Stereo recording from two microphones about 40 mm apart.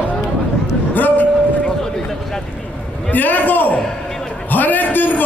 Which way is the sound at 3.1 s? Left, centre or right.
Left.